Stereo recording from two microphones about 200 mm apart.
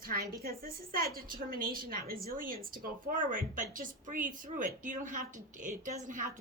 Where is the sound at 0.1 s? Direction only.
50° right (ahead or behind).